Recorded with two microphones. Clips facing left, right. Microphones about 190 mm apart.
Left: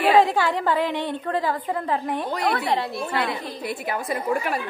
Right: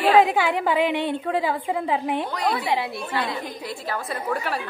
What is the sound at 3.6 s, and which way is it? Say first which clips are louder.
A woman's voice: left 2 dB; 20° left (ahead or behind).